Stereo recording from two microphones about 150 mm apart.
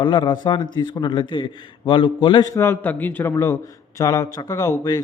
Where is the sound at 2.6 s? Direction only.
15° left (ahead or behind).